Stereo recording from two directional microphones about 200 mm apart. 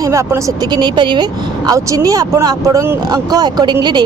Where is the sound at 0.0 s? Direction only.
15° right (ahead or behind).